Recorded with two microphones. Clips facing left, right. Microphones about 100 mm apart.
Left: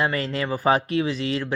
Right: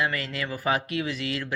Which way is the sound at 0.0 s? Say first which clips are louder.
Left 4 dB; 35° left (ahead or behind).